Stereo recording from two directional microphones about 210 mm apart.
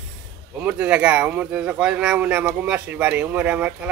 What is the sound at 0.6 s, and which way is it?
Speech, 5° right (ahead or behind).